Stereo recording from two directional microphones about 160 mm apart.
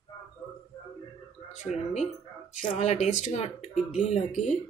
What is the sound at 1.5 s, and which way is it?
Speech, 45° left (ahead or behind).